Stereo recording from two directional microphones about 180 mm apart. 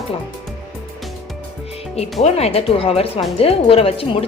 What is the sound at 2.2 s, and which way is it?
Speech, 35° left (ahead or behind).